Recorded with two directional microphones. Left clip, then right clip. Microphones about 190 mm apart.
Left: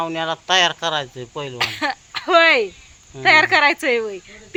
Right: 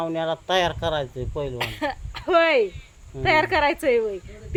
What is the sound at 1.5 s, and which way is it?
Speech, 10° left (ahead or behind).